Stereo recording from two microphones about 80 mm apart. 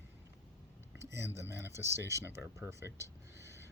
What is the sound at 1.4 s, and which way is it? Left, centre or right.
Speech, right.